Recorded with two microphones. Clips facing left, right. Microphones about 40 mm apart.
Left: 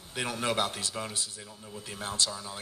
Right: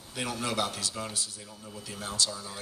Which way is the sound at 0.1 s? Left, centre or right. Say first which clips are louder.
Left 2 dB; left.